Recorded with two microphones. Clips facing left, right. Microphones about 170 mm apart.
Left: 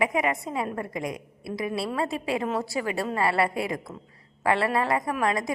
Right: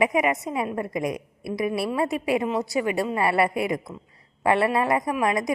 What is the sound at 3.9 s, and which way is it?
Speech, 5° left (ahead or behind).